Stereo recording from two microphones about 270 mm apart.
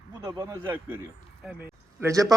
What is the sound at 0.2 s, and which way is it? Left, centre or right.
Speech, centre.